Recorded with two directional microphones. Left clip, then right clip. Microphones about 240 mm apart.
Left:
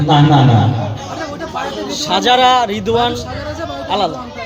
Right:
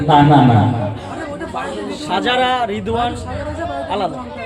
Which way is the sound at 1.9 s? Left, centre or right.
Left.